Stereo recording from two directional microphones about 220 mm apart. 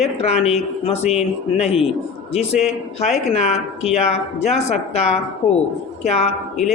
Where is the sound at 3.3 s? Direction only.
30° left (ahead or behind).